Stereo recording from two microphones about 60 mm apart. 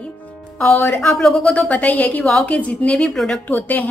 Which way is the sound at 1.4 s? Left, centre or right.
Left.